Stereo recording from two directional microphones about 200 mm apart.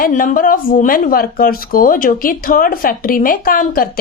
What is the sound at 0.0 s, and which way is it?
A woman's voice, 45° left (ahead or behind).